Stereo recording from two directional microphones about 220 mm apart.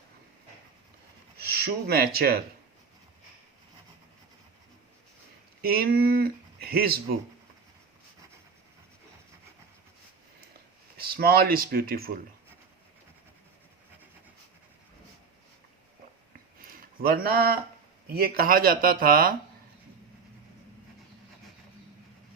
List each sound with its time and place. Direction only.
1.5 s speech: 45° right (ahead or behind)
5.6 s speech: 45° right (ahead or behind)
10.9 s speech: 45° right (ahead or behind)
16.6 s a sound: 40° right (ahead or behind)
18.1 s speech: 45° right (ahead or behind)